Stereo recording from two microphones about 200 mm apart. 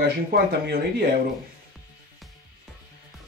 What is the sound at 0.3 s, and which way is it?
Speech, 50° right (ahead or behind).